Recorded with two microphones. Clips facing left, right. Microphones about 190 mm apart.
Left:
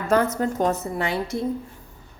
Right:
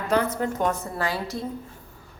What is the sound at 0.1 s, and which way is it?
Speech, 40° left (ahead or behind).